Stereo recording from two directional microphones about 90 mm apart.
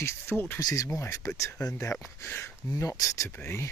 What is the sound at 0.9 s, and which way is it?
Speech, 35° left (ahead or behind).